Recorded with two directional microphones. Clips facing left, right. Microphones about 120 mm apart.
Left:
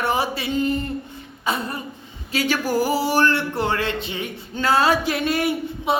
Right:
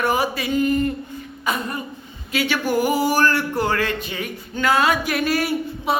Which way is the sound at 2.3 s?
40° left (ahead or behind).